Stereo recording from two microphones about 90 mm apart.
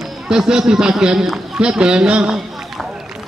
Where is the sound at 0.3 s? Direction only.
5° right (ahead or behind).